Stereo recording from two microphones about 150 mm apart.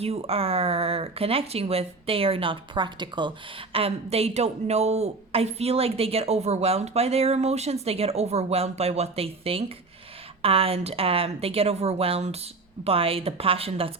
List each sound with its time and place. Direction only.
0.0 s speech: 45° right (ahead or behind)